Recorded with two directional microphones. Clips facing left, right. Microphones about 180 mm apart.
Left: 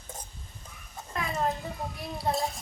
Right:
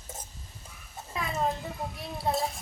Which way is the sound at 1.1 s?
Centre (ahead or behind).